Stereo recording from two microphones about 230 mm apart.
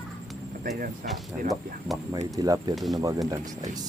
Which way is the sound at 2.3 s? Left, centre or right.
Centre.